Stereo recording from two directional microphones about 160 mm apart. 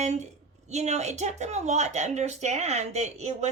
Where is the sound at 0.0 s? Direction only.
45° right (ahead or behind).